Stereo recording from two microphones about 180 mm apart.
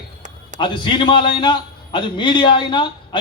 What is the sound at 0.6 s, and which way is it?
A man's voice, 25° left (ahead or behind).